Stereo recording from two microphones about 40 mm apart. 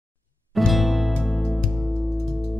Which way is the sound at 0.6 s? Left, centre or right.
Centre.